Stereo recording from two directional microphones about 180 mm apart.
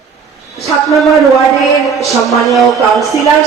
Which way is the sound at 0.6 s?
Centre (ahead or behind).